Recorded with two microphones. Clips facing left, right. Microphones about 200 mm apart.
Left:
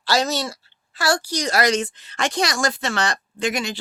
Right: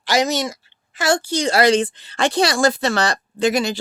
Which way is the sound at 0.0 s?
15° right (ahead or behind).